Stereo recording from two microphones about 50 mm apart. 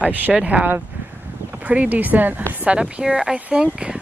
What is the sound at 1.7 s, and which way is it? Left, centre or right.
Speech, right.